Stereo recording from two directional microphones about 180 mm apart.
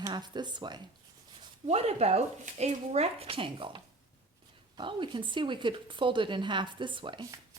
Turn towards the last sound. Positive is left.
turn(degrees=-25)  # may be behind; listen again after turning